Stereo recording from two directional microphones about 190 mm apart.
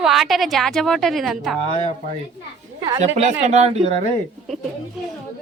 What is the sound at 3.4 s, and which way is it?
Speech, 35° right (ahead or behind).